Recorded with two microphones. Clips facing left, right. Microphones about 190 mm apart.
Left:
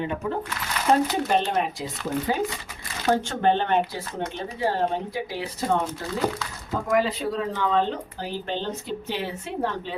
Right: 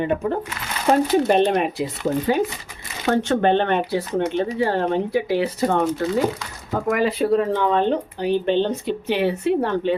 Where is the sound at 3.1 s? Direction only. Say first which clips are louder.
Right 4 dB; 65° right (ahead or behind).